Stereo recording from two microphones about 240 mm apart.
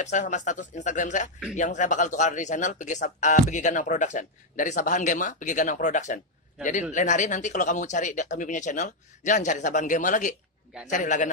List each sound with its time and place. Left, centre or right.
0.0 s speech: left